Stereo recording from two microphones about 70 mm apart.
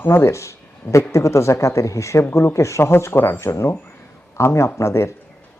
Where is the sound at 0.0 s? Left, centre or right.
Left.